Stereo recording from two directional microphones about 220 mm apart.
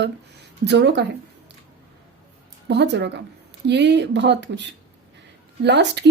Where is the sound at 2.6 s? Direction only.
50° right (ahead or behind).